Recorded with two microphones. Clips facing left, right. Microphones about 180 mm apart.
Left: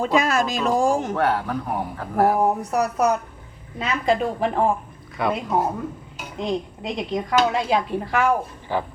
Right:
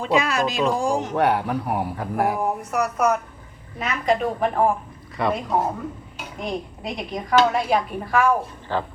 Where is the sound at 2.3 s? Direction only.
35° left (ahead or behind).